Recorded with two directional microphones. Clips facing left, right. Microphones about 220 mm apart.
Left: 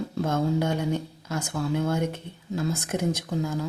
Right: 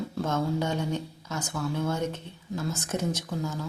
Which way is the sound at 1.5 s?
25° left (ahead or behind).